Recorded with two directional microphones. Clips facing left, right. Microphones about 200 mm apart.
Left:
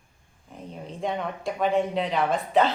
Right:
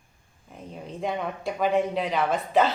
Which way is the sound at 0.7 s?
Centre (ahead or behind).